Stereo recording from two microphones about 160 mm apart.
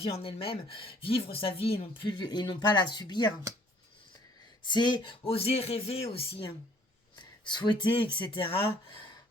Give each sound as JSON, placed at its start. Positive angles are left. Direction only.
{"t": 0.0, "sound": "speech", "side_deg": 35}
{"t": 4.6, "sound": "speech", "side_deg": 30}